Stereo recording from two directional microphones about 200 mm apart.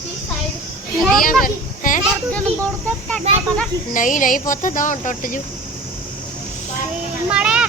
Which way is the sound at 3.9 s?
40° left (ahead or behind).